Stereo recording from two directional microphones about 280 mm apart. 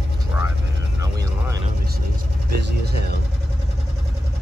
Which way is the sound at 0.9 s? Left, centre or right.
Centre.